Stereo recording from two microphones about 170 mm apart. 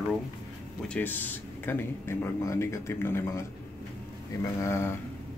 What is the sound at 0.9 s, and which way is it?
Speech, 10° left (ahead or behind).